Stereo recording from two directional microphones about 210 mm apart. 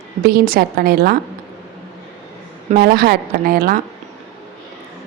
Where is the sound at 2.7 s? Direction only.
45° right (ahead or behind).